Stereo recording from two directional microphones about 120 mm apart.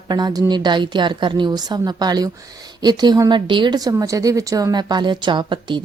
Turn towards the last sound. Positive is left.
turn(degrees=-40)  # may be behind; listen again after turning